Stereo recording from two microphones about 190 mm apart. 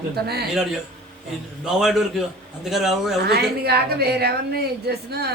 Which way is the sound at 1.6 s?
Centre (ahead or behind).